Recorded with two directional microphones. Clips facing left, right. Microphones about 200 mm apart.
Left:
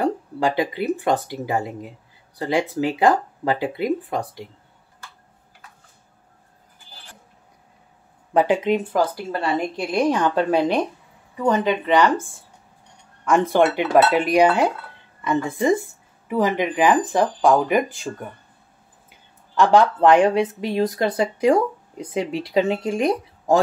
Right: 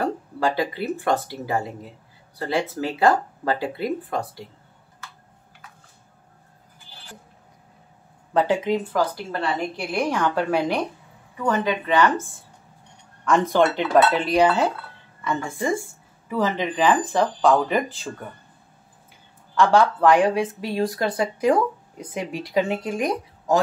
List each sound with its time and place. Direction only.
0.0 s speech: 15° left (ahead or behind)
8.3 s speech: 15° left (ahead or behind)
19.6 s speech: 15° left (ahead or behind)